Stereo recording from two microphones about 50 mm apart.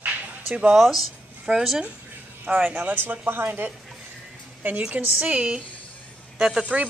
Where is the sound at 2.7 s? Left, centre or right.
Right.